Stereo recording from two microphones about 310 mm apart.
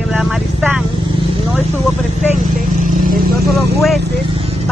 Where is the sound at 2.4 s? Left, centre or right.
Right.